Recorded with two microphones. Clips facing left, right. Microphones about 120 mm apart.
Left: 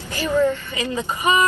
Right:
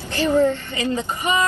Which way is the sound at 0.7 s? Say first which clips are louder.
Right 1 dB; 15° left (ahead or behind).